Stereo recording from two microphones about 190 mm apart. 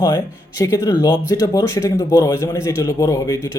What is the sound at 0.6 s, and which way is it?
Speech, 20° left (ahead or behind).